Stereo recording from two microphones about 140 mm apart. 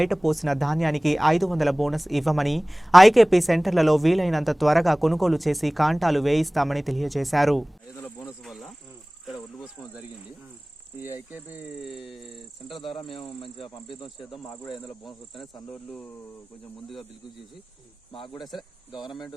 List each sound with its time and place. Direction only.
0.0 s speech: centre (ahead or behind)
7.9 s a sound: 20° left (ahead or behind)
8.4 s speech: centre (ahead or behind)
9.2 s insect: centre (ahead or behind)
11.0 s speech: 15° right (ahead or behind)
12.8 s speech: 35° left (ahead or behind)
14.3 s speech: centre (ahead or behind)